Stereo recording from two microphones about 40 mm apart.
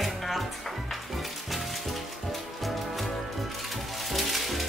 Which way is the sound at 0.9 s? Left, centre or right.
Centre.